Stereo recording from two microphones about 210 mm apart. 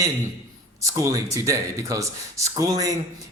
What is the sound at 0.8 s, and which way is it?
Speech, 15° right (ahead or behind).